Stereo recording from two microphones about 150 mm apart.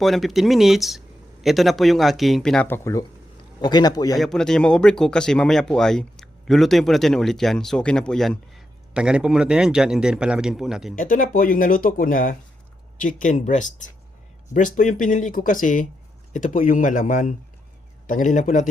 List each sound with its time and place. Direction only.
0.0 s speech: centre (ahead or behind); by 3.0 s 15° left (ahead or behind)
3.6 s a man's voice: 30° left (ahead or behind)
4.2 s speech: 5° left (ahead or behind)
10.9 s speech: 65° left (ahead or behind)